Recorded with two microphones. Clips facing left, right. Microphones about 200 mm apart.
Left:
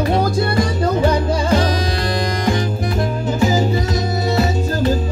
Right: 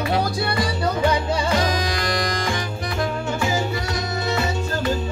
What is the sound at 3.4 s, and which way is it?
Music, 35° left (ahead or behind).